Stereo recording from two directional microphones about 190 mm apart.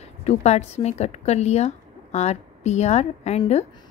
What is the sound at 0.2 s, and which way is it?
A woman's voice, 35° left (ahead or behind).